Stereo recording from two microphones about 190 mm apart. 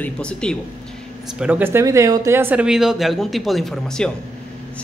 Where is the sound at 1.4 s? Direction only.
10° right (ahead or behind).